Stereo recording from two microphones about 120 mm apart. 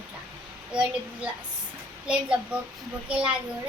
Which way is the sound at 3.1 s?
10° right (ahead or behind).